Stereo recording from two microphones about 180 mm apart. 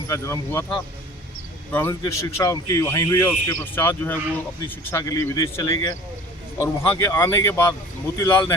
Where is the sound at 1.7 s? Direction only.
10° left (ahead or behind).